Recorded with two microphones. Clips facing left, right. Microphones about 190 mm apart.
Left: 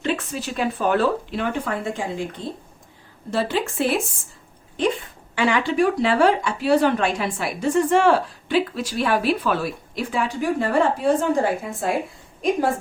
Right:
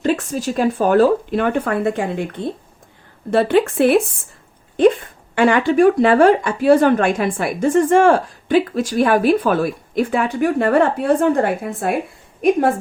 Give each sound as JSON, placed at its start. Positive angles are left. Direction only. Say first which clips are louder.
{"t": 0.0, "sound": "speech", "louder": "right 6 dB", "side_deg": -40}